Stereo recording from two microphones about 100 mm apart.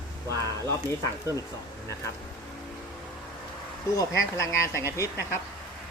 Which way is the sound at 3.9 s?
30° left (ahead or behind).